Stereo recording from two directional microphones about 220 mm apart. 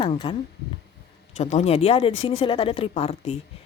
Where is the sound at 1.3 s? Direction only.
30° left (ahead or behind).